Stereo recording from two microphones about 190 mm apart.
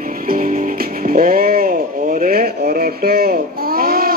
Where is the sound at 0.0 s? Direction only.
45° right (ahead or behind).